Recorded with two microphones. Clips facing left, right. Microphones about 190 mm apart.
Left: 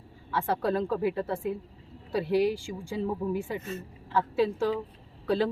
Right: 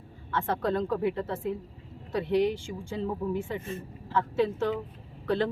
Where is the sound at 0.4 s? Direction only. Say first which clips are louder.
Left 1 dB; 5° left (ahead or behind).